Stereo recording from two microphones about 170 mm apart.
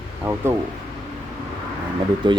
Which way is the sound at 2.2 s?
30° right (ahead or behind).